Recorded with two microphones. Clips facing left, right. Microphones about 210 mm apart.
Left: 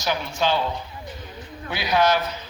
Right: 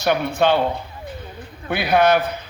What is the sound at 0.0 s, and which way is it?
Speech, 60° right (ahead or behind).